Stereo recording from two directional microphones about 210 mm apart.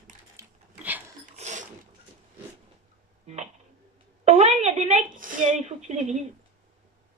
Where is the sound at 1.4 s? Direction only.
35° right (ahead or behind).